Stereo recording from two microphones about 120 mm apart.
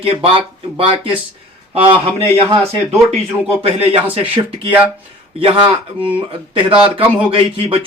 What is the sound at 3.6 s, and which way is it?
Speech, 55° right (ahead or behind).